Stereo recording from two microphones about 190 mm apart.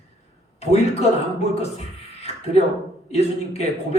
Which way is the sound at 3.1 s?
35° left (ahead or behind).